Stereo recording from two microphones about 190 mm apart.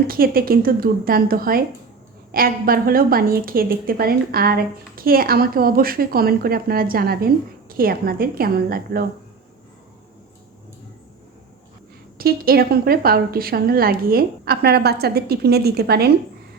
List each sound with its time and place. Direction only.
0.1 s a woman's voice: 50° right (ahead or behind)
12.1 s a woman's voice: 55° right (ahead or behind)